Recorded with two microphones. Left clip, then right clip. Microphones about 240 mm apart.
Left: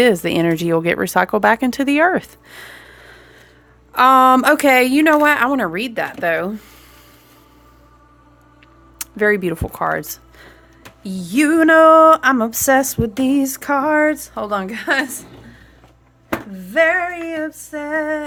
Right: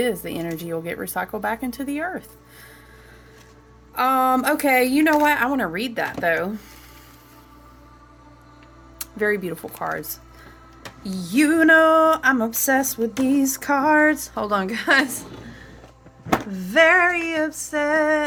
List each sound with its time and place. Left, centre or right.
0.0 s speech: left
9.0 s speech: left
11.0 s a sound: left
16.5 s female singing: centre